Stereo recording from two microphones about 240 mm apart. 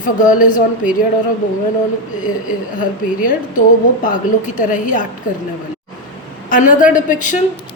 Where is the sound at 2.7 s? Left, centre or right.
Left.